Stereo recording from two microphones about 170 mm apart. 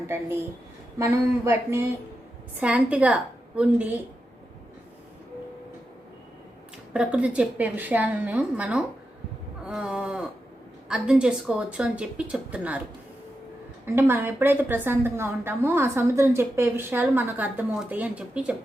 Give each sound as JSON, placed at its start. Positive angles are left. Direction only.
{"t": 0.9, "sound": "a woman's voice", "side_deg": -15}
{"t": 6.9, "sound": "a woman's voice", "side_deg": -5}
{"t": 13.8, "sound": "a woman's voice", "side_deg": -15}